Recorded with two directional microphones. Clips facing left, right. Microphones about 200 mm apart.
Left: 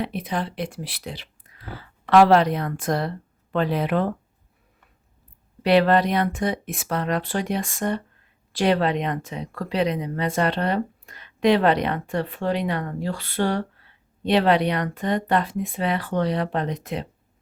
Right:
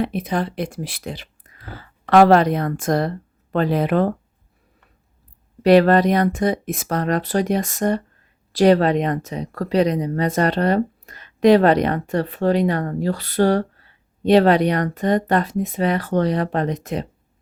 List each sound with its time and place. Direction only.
0.0 s speech: 45° right (ahead or behind)
5.6 s speech: 45° right (ahead or behind)